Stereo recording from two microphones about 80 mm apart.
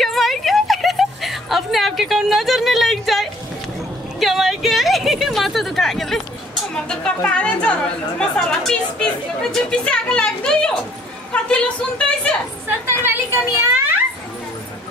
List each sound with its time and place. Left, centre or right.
0.0 s a sound: centre
7.2 s speech: centre
13.0 s a child's voice: right